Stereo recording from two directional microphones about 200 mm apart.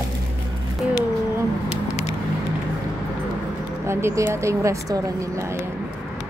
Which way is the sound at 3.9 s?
15° right (ahead or behind).